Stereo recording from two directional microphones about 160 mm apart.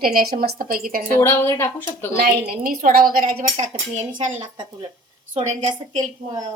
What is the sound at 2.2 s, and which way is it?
Speech, 65° right (ahead or behind).